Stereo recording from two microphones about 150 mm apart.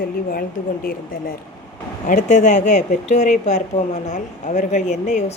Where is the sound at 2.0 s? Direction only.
55° left (ahead or behind).